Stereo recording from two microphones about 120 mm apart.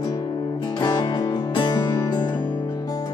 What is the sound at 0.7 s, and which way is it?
Music, 35° left (ahead or behind).